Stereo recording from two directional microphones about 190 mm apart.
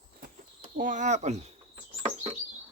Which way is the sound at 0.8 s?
40° right (ahead or behind).